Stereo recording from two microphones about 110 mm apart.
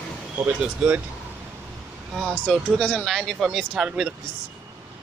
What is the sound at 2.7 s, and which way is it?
Speech, 10° left (ahead or behind).